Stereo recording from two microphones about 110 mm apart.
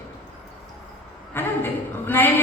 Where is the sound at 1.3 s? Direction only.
20° left (ahead or behind).